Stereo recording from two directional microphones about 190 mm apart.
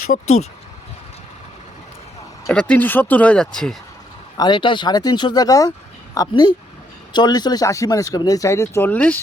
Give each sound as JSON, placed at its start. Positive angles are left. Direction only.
{"t": 0.1, "sound": "speech", "side_deg": 35}
{"t": 2.5, "sound": "speech", "side_deg": 5}
{"t": 4.4, "sound": "speech", "side_deg": 25}